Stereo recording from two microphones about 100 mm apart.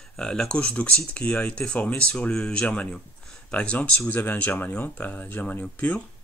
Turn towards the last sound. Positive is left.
turn(degrees=15)  # may be behind; listen again after turning